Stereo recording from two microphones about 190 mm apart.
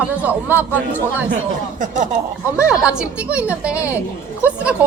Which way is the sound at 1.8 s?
40° right (ahead or behind).